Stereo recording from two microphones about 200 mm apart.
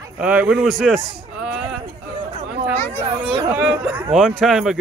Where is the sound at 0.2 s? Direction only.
5° right (ahead or behind).